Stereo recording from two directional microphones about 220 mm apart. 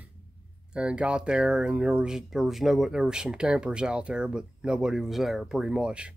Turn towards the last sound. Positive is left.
turn(degrees=-5)  # may be behind; listen again after turning